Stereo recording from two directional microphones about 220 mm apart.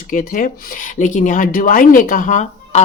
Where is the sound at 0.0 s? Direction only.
35° left (ahead or behind).